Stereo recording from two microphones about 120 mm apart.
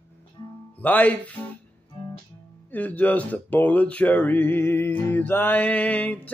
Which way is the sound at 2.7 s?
15° left (ahead or behind).